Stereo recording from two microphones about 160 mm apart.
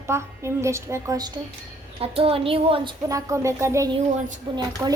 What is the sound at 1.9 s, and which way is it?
A woman's voice, 35° right (ahead or behind).